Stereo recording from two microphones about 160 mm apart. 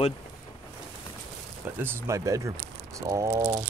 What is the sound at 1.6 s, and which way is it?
Speech, 15° right (ahead or behind).